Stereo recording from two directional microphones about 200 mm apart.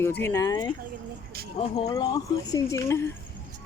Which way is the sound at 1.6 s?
25° left (ahead or behind).